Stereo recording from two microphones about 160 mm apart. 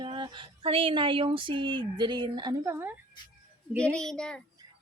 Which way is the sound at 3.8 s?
5° left (ahead or behind).